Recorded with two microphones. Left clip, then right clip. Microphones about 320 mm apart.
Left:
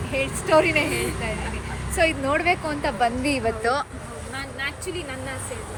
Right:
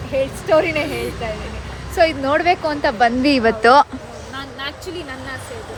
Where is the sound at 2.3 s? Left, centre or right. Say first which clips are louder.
Right 6 dB; centre.